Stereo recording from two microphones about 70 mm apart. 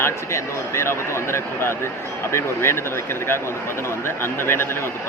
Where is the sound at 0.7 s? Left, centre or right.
Left.